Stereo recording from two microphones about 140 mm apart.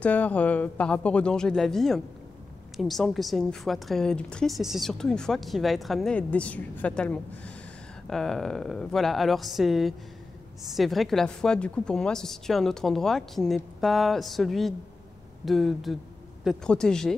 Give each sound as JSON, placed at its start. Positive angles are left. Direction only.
{"t": 0.0, "sound": "a man's voice", "side_deg": 10}